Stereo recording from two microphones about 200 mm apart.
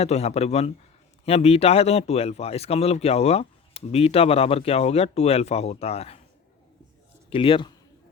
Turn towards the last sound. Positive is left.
turn(degrees=25)  # may be behind; listen again after turning